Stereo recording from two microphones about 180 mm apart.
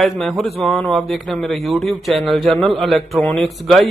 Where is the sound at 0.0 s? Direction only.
Centre (ahead or behind).